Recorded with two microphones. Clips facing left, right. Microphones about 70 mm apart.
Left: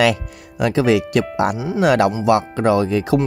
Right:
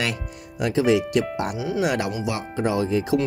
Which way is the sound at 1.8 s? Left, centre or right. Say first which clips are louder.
Left 11 dB; left.